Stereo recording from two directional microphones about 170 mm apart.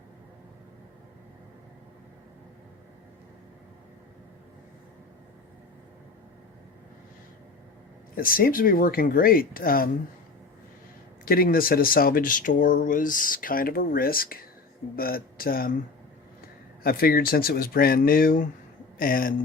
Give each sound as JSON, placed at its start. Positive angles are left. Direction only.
{"t": 8.1, "sound": "speech", "side_deg": 60}
{"t": 11.3, "sound": "speech", "side_deg": 60}
{"t": 16.8, "sound": "speech", "side_deg": 60}